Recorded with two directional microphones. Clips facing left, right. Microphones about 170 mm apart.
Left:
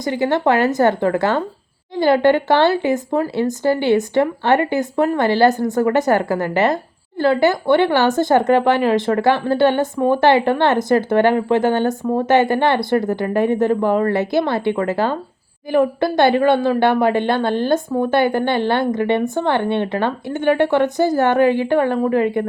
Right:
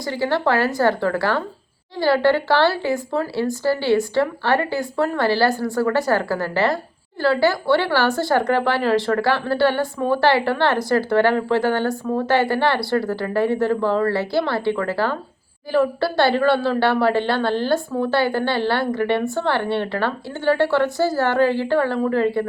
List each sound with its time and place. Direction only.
0.0 s a woman's voice: 20° left (ahead or behind)